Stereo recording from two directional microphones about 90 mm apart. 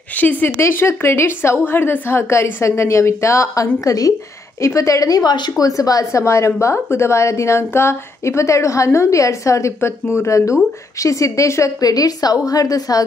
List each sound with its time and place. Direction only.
0.2 s a woman's voice: 20° left (ahead or behind); by 13.0 s 45° left (ahead or behind)